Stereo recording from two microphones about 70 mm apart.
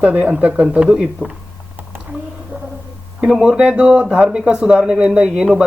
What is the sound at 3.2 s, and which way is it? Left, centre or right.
Speech, centre.